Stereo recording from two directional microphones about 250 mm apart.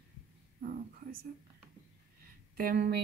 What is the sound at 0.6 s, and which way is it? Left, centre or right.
Speech, right.